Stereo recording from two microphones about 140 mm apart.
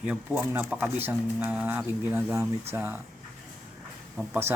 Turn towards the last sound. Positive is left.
turn(degrees=-15)  # may be behind; listen again after turning